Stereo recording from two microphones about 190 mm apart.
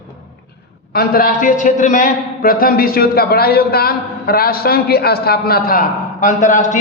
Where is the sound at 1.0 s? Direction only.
50° left (ahead or behind).